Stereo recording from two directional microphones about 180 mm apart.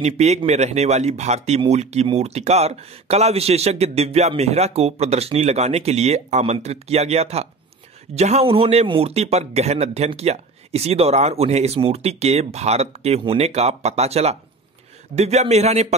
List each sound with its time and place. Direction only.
0.0 s speech: 35° right (ahead or behind)